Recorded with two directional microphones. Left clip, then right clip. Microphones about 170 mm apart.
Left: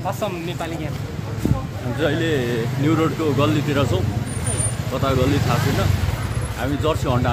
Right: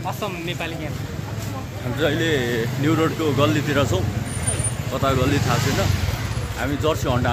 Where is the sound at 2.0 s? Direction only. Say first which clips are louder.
Even; 10° right (ahead or behind).